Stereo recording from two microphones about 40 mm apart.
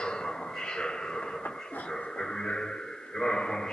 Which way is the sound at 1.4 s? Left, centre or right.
Left.